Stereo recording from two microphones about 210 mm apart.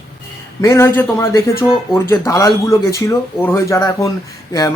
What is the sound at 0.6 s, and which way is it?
Speech, 15° left (ahead or behind).